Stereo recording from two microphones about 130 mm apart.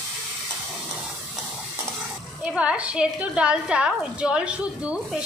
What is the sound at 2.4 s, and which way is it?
A woman's voice, 10° right (ahead or behind).